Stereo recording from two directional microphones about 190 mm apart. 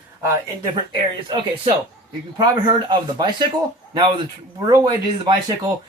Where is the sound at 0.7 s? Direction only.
25° right (ahead or behind).